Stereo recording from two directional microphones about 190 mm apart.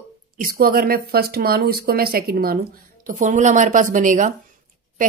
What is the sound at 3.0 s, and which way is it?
A woman's voice, 40° right (ahead or behind).